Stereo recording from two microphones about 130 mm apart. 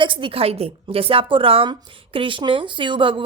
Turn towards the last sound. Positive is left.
turn(degrees=-40)  # may be behind; listen again after turning